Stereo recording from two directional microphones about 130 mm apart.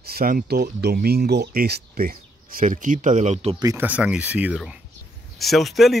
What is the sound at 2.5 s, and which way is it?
Speech, 85° right.